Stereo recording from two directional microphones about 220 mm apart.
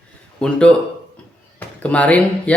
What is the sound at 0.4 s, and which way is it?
A man's voice, 5° left (ahead or behind).